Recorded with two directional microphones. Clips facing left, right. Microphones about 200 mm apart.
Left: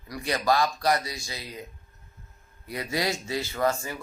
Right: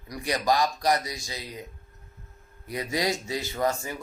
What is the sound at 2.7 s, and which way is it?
A man's voice, 15° right (ahead or behind).